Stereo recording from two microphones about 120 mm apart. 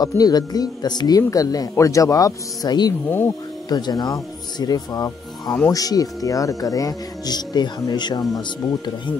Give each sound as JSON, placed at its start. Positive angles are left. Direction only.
{"t": 0.0, "sound": "speech", "side_deg": 35}